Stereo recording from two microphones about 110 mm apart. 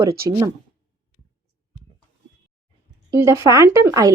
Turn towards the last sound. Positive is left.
turn(degrees=-30)  # may be behind; listen again after turning